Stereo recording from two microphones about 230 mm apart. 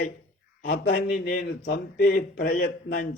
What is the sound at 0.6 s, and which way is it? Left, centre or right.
A man's voice, left.